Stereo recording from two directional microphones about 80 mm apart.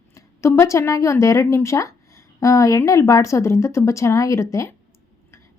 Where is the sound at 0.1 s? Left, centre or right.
Left.